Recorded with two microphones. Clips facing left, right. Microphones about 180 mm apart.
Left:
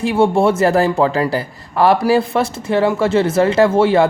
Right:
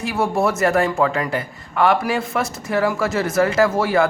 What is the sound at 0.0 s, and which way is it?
A man's voice, 30° left (ahead or behind).